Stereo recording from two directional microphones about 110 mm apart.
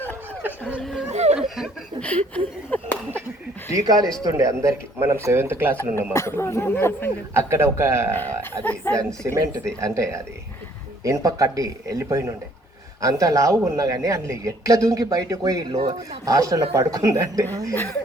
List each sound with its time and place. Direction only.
0.8 s a sound: 5° left (ahead or behind)
1.1 s a sound: 90° right
1.4 s laughter: 5° right (ahead or behind)
2.0 s speech: 10° left (ahead or behind)
3.7 s speech: 30° right (ahead or behind)
6.1 s speech: 25° left (ahead or behind)
7.3 s speech: 25° right (ahead or behind)
8.1 s speech: 15° left (ahead or behind)
9.0 s speech: 30° right (ahead or behind)